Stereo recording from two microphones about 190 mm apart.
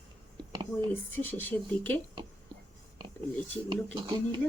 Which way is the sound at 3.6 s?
25° right (ahead or behind).